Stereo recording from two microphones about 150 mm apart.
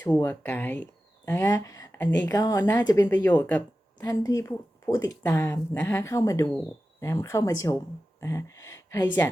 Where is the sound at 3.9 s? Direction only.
25° left (ahead or behind).